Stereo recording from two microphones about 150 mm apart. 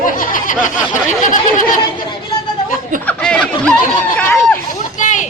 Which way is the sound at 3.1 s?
10° left (ahead or behind).